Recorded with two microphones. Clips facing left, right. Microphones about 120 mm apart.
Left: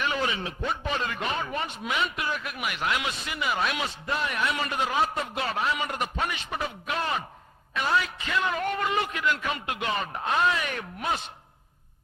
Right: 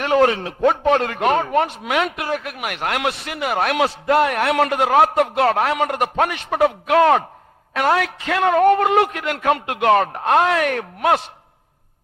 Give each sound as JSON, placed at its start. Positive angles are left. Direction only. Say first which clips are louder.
{"t": 0.0, "sound": "a man's voice", "louder": "right 12 dB", "side_deg": -65}